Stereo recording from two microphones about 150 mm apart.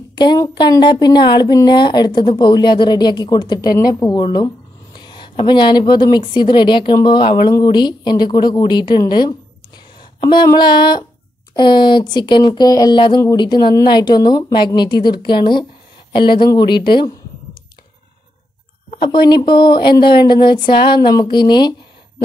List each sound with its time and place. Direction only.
0.1 s speech: 30° left (ahead or behind)
18.9 s speech: 30° left (ahead or behind)